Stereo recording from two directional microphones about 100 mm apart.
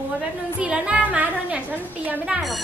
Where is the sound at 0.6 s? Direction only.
10° right (ahead or behind).